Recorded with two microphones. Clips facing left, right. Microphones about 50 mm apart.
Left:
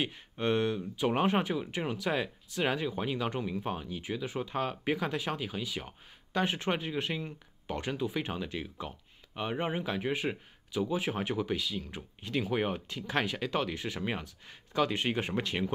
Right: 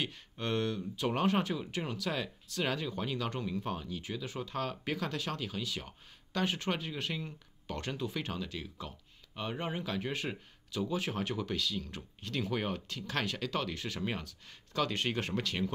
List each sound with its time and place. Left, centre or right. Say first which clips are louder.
0.0 s speech: left 5 dB; left